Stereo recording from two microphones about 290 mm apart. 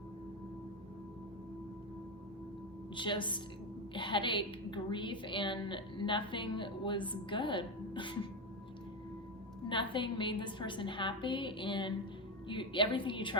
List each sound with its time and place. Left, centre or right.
2.9 s a woman's voice: centre
9.6 s a woman's voice: centre